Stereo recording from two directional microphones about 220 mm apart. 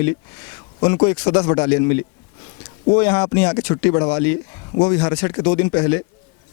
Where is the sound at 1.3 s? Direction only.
20° left (ahead or behind).